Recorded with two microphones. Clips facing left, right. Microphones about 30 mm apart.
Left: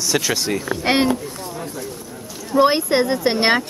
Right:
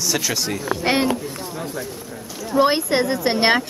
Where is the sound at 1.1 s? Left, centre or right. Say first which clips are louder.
Left 1 dB; centre.